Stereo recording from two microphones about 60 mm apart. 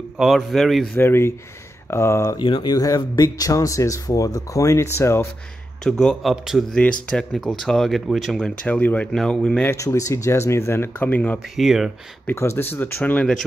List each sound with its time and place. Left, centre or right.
0.2 s a man's voice: centre
0.9 s speech: left
2.7 s speech: left
5.9 s speech: centre
6.3 s speech: centre
6.8 s speech: centre
8.6 s speech: left
9.1 s speech: centre
9.8 s speech: left
11.0 s speech: left
11.5 s a man's voice: centre
12.4 s speech: left